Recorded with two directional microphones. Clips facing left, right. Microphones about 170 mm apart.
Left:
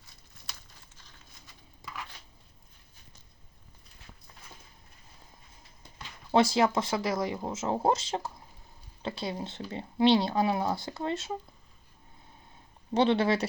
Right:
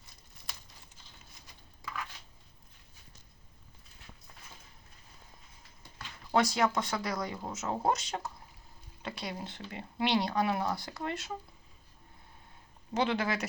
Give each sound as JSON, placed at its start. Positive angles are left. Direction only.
{"t": 6.3, "sound": "speech", "side_deg": 25}
{"t": 12.9, "sound": "speech", "side_deg": 30}